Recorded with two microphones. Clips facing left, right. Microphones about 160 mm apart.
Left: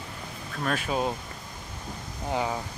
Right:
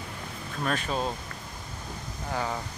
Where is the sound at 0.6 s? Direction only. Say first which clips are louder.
Left 1 dB; 5° left (ahead or behind).